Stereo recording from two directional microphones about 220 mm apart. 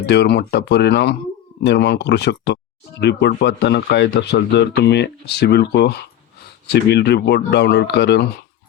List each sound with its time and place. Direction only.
0.0 s speech: 50° left (ahead or behind)